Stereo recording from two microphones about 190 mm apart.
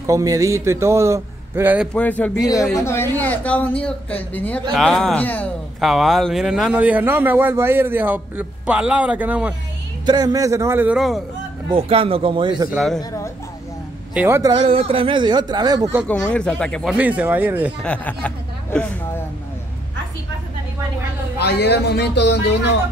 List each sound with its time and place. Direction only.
0.0 s speech: 15° right (ahead or behind)
2.0 s speech: 10° left (ahead or behind)
2.3 s speech: 20° left (ahead or behind); by 9.5 s 5° right (ahead or behind)
10.0 s speech: 20° right (ahead or behind); by 11.2 s centre (ahead or behind)
11.7 s speech: 30° right (ahead or behind)
12.7 s speech: centre (ahead or behind)
14.1 s speech: 10° right (ahead or behind)
14.5 s speech: 30° right (ahead or behind)
16.1 s speech: 5° left (ahead or behind)
16.9 s speech: 10° right (ahead or behind)
17.8 s speech: 5° left (ahead or behind)
21.4 s a man's voice: 60° left (ahead or behind)